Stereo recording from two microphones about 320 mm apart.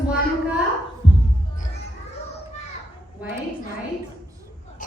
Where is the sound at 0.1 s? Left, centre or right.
Centre.